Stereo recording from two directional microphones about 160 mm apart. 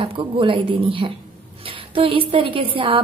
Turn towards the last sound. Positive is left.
turn(degrees=-35)  # may be behind; listen again after turning